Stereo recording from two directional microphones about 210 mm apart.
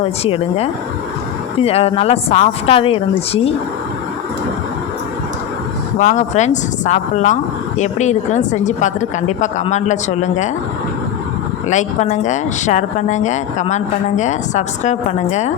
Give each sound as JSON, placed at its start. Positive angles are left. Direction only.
{"t": 0.0, "sound": "speech", "side_deg": 25}
{"t": 6.0, "sound": "speech", "side_deg": 35}
{"t": 11.7, "sound": "speech", "side_deg": 35}